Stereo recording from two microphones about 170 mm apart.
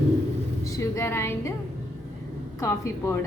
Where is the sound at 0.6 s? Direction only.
20° left (ahead or behind).